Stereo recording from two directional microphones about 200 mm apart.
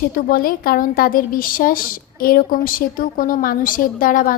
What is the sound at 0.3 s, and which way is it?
A woman's voice, 45° left (ahead or behind).